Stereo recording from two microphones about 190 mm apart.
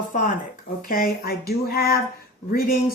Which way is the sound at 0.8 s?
50° left (ahead or behind).